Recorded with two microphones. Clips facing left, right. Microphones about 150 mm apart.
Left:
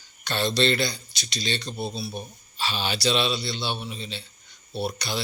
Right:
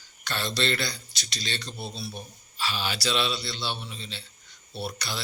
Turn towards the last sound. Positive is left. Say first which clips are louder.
# left 5 dB
turn(degrees=20)  # may be behind; listen again after turning